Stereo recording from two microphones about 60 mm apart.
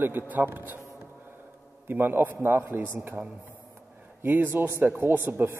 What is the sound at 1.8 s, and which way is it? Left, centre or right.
A man's voice, right.